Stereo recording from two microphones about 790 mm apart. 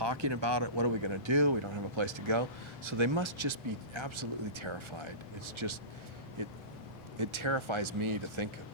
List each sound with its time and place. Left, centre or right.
0.0 s speech: right
7.2 s speech: right